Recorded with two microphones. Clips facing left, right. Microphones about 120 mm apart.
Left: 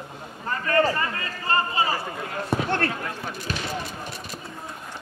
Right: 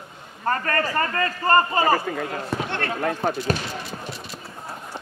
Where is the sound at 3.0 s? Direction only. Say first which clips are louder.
Right 9 dB; 55° right (ahead or behind).